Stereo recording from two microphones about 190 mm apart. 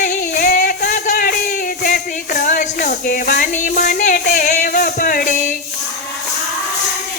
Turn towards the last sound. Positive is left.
turn(degrees=40)  # may be behind; listen again after turning